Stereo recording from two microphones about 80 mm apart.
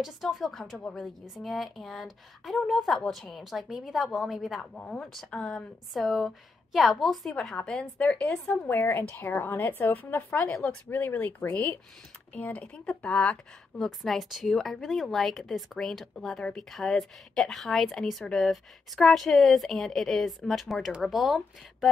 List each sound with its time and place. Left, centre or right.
0.0 s a woman's voice: centre
8.6 s a woman's voice: left
13.7 s a woman's voice: centre